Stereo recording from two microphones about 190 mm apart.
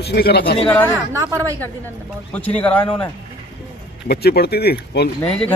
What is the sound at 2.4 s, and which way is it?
Speech, 5° left (ahead or behind).